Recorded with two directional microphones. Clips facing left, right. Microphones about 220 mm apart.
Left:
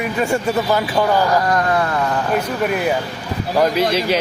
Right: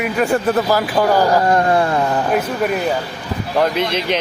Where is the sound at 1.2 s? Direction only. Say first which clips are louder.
Right 3 dB; 30° right (ahead or behind).